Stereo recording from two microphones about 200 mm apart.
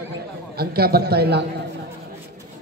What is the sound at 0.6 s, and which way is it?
Speech, 50° right (ahead or behind).